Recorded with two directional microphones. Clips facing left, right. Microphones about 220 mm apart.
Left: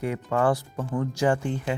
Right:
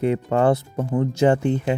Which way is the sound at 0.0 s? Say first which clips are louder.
Right 6 dB; 25° right (ahead or behind).